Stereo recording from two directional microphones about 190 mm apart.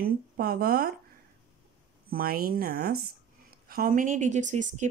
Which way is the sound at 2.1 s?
50° right (ahead or behind).